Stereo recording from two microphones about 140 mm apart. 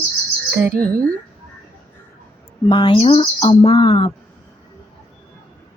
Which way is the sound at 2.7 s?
40° left (ahead or behind).